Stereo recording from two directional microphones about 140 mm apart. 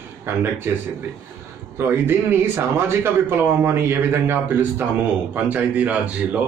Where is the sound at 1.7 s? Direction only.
15° right (ahead or behind).